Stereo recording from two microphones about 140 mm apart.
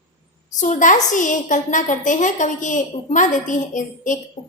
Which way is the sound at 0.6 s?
65° left (ahead or behind).